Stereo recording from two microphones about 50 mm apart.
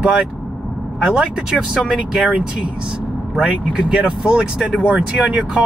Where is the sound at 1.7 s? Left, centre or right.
Centre.